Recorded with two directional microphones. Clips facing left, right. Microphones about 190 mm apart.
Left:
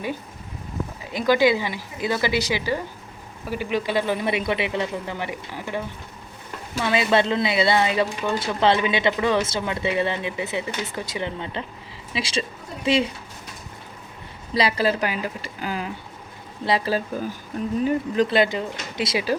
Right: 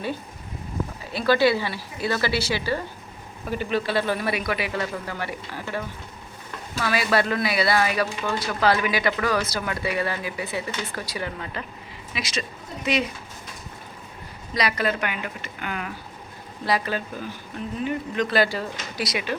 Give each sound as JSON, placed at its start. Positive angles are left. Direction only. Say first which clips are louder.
{"t": 1.1, "sound": "speech", "louder": "left 1 dB", "side_deg": 15}
{"t": 14.5, "sound": "speech", "louder": "left 3 dB", "side_deg": 30}